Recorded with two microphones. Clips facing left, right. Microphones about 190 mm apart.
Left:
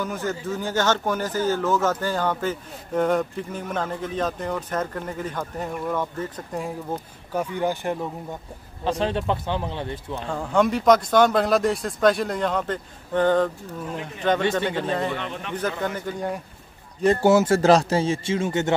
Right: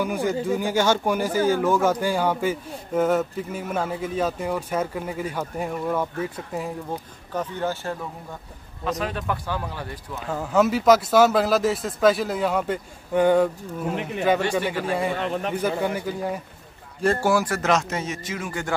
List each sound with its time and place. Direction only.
0.0 s speech: 10° right (ahead or behind)
7.3 s speech: 15° left (ahead or behind)
8.8 s speech: 30° left (ahead or behind)
10.2 s speech: 5° right (ahead or behind)
15.1 s a man's voice: 40° right (ahead or behind)
15.8 s speech: 10° right (ahead or behind)
17.0 s speech: 20° left (ahead or behind)